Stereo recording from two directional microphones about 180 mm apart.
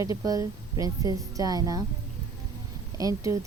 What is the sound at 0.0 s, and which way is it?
Speech, 20° right (ahead or behind).